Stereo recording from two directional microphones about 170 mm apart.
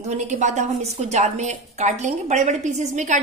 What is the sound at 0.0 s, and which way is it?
A woman's voice, 45° right (ahead or behind).